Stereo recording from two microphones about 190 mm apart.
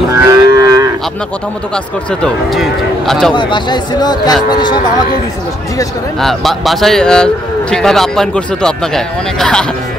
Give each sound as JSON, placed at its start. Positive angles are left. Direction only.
{"t": 0.3, "sound": "livestock", "side_deg": -15}
{"t": 2.2, "sound": "speech", "side_deg": 0}
{"t": 3.3, "sound": "a man's voice", "side_deg": 25}
{"t": 6.2, "sound": "speech", "side_deg": 0}